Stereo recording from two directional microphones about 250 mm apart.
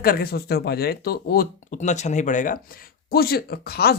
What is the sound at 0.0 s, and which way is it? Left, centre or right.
A man's voice, left.